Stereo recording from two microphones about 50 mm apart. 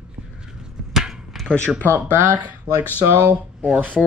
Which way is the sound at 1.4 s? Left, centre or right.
Left.